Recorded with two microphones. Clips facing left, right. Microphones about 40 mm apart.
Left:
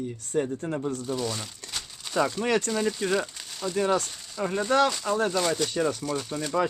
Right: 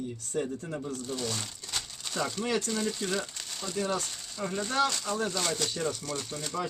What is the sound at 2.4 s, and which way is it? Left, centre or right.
Speech, left.